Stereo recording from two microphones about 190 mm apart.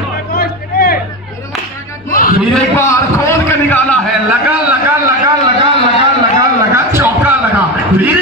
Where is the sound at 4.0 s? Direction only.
5° right (ahead or behind).